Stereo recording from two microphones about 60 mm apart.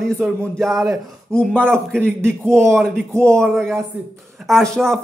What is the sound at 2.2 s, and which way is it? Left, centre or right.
Speech, right.